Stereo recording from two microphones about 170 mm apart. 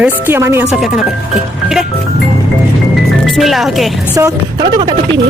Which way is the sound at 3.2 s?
Centre (ahead or behind).